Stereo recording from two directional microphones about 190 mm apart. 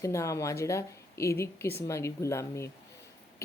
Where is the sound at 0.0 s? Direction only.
15° left (ahead or behind).